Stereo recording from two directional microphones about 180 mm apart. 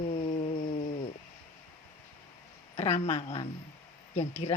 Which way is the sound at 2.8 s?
35° left (ahead or behind).